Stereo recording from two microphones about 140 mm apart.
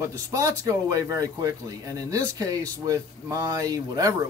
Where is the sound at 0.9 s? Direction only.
25° right (ahead or behind).